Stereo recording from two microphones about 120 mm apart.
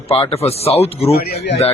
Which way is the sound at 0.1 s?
55° left (ahead or behind).